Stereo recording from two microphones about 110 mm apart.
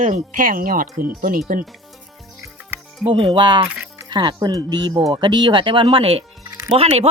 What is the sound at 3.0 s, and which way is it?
Speech, 50° right (ahead or behind).